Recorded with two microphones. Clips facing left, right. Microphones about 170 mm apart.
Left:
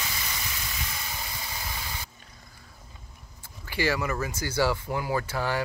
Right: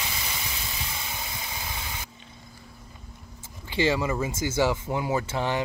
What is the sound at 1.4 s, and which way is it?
Engine, 20° right (ahead or behind).